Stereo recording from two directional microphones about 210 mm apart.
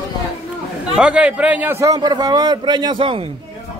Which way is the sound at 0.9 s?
5° right (ahead or behind).